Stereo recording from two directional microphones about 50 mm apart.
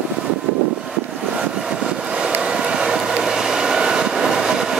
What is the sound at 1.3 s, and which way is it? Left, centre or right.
Vehicle, centre.